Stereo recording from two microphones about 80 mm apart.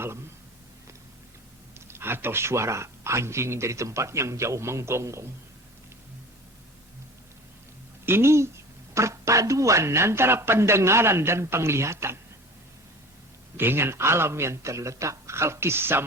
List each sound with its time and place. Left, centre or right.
1.9 s a woman's voice: right
8.0 s a woman's voice: right
13.6 s a woman's voice: right